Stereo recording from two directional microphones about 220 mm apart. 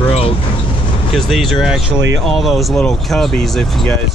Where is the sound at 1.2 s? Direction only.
Centre (ahead or behind).